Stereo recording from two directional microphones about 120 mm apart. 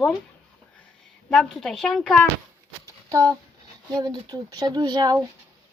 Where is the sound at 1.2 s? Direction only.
5° left (ahead or behind).